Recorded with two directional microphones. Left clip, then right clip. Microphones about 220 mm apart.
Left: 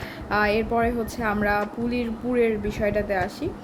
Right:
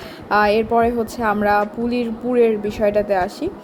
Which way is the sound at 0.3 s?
20° right (ahead or behind).